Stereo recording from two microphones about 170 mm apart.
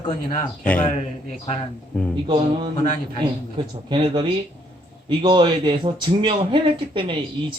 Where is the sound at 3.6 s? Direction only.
30° right (ahead or behind).